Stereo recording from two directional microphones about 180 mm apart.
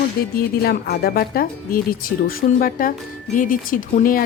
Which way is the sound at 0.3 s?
60° left (ahead or behind).